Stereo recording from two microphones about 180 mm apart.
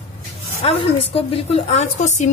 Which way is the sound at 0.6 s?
35° left (ahead or behind).